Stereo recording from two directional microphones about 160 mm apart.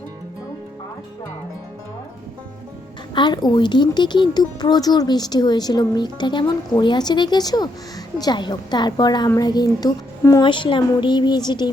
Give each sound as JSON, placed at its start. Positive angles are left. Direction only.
{"t": 3.2, "sound": "speech", "side_deg": 25}